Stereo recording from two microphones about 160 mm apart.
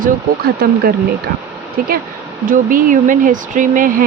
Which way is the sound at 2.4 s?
60° right (ahead or behind).